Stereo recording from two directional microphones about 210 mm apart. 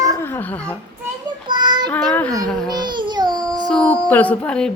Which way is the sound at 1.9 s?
5° left (ahead or behind).